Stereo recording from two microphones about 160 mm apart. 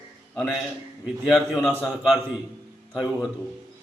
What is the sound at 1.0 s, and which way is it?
Speech, centre (ahead or behind).